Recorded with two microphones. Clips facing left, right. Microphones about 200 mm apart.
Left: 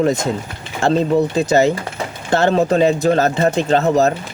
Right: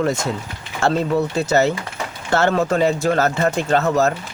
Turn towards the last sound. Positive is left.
turn(degrees=20)  # may be behind; listen again after turning